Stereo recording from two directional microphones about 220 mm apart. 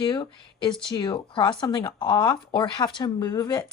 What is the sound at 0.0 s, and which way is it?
Speech, 20° left (ahead or behind).